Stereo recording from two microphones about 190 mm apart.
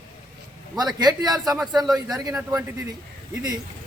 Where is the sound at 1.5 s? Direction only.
Centre (ahead or behind).